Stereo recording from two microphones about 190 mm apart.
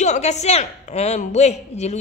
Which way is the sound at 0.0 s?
35° left (ahead or behind).